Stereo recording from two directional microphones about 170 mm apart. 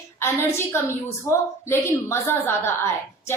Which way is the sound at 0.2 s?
15° left (ahead or behind).